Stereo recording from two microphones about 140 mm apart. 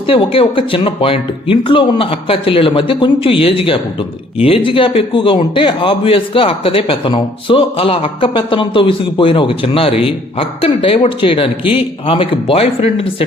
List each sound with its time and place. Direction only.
0.1 s a man's voice: 40° left (ahead or behind)